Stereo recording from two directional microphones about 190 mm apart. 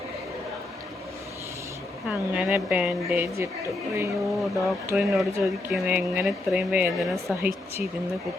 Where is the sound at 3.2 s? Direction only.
15° right (ahead or behind).